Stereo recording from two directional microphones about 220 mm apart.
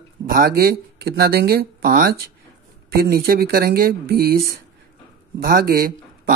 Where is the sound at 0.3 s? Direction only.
40° right (ahead or behind).